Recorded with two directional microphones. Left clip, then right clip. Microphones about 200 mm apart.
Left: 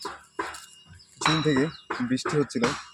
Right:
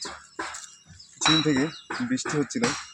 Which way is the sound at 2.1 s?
35° left (ahead or behind).